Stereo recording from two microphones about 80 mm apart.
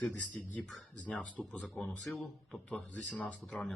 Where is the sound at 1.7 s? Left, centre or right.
Centre.